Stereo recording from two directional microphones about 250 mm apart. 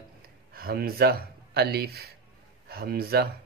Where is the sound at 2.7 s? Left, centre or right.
Right.